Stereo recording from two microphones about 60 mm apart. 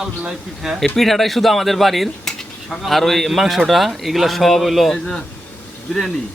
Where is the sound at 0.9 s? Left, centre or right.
Centre.